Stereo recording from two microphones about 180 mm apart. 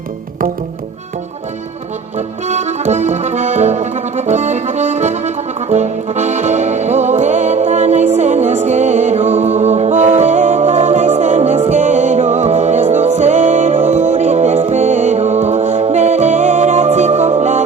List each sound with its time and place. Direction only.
2.1 s accordion: 40° right (ahead or behind)